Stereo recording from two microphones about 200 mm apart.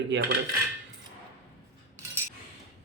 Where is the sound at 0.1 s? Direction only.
60° right (ahead or behind).